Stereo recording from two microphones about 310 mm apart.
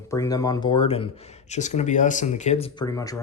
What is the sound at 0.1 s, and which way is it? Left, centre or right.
Speech, centre.